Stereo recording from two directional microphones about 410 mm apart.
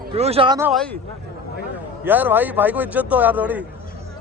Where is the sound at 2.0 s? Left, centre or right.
Centre.